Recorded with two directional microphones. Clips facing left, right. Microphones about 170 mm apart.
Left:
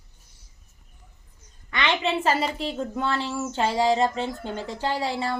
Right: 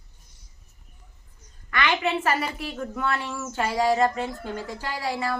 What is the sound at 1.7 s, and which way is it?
A woman's voice, 25° left (ahead or behind).